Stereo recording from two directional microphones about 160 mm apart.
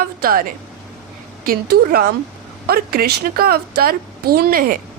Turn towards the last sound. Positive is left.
turn(degrees=-65)  # may be behind; listen again after turning